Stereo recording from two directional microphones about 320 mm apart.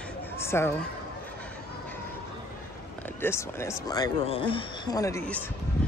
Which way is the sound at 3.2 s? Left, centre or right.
Centre.